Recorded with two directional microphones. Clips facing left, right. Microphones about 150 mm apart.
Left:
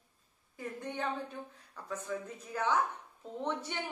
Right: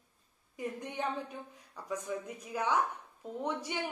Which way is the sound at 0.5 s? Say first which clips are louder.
Right 1 dB; 15° right (ahead or behind).